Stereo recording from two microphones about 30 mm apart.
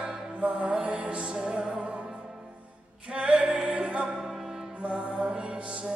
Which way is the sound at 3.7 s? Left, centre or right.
Right.